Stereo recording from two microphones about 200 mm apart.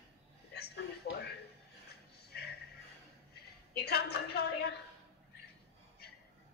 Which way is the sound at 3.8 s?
55° left (ahead or behind).